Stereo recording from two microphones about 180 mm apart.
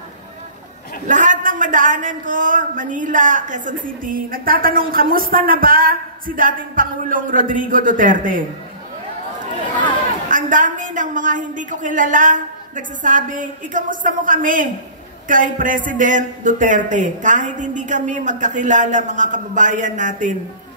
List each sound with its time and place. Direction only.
1.0 s a man's voice: 45° right (ahead or behind)
10.2 s a man's voice: 45° right (ahead or behind)